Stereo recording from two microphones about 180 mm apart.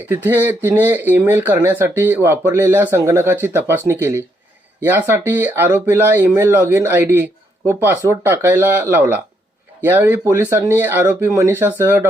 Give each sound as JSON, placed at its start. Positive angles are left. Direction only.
{"t": 0.1, "sound": "speech", "side_deg": -10}